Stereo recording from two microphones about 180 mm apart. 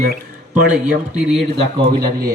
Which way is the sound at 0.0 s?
50° right (ahead or behind).